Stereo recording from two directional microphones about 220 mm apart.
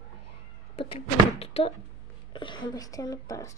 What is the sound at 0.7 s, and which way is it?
Slam, 25° left (ahead or behind).